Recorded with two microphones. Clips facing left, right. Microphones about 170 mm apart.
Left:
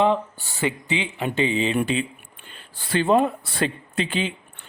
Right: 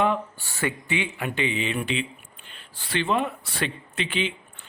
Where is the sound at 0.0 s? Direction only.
20° left (ahead or behind).